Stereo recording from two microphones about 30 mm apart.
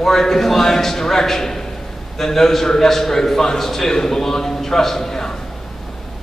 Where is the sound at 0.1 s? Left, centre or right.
Centre.